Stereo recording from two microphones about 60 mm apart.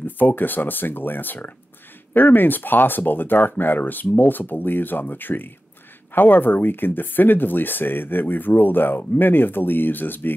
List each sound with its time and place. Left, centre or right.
0.0 s speech: left